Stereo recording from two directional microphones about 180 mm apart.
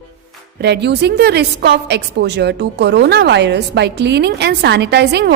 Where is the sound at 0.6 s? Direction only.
70° right (ahead or behind).